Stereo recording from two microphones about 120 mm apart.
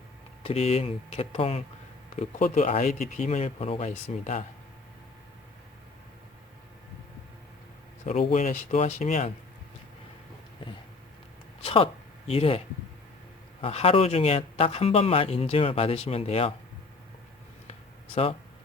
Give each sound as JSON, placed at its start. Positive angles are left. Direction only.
{"t": 0.4, "sound": "speech", "side_deg": 55}
{"t": 2.1, "sound": "speech", "side_deg": 65}
{"t": 8.0, "sound": "speech", "side_deg": 65}
{"t": 11.6, "sound": "a sound", "side_deg": 50}
{"t": 12.3, "sound": "speech", "side_deg": 55}
{"t": 17.7, "sound": "a sound", "side_deg": 55}